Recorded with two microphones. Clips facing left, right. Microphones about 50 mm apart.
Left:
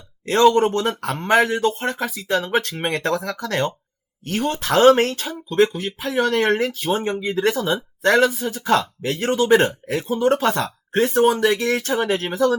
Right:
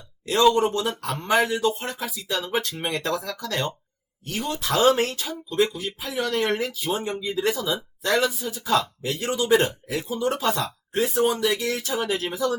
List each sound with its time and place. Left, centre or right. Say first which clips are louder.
0.3 s speech: left 4 dB; left